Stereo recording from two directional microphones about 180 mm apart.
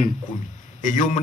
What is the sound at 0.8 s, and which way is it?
Speech, 45° left (ahead or behind).